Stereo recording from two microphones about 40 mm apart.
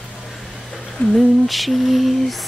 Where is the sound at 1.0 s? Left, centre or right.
Left.